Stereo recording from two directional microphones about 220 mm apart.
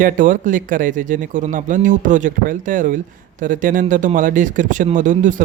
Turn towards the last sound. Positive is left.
turn(degrees=-35)  # may be behind; listen again after turning